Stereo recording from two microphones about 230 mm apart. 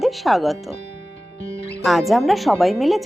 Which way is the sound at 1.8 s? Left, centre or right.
Centre.